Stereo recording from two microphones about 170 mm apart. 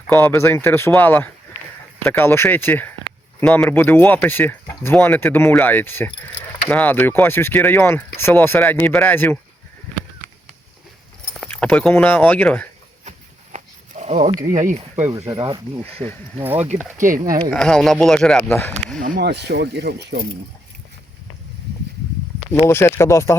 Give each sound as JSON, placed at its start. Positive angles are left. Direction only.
{"t": 0.1, "sound": "speech", "side_deg": 15}
{"t": 11.3, "sound": "speech", "side_deg": 5}
{"t": 13.1, "sound": "a sound", "side_deg": -40}
{"t": 14.7, "sound": "speech", "side_deg": -45}
{"t": 15.2, "sound": "speech", "side_deg": -30}
{"t": 16.4, "sound": "speech", "side_deg": -10}
{"t": 17.2, "sound": "speech", "side_deg": -20}
{"t": 17.5, "sound": "speech", "side_deg": 5}
{"t": 19.2, "sound": "speech", "side_deg": -80}
{"t": 22.6, "sound": "speech", "side_deg": 15}